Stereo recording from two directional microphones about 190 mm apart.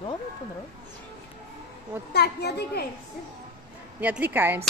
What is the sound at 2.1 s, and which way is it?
Speech, 60° left (ahead or behind).